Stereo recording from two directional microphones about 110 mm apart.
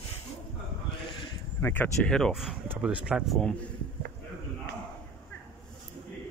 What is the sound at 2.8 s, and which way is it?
Speech, 10° right (ahead or behind).